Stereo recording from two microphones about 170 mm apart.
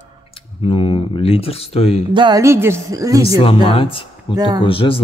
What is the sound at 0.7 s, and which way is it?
Speech, 35° left (ahead or behind).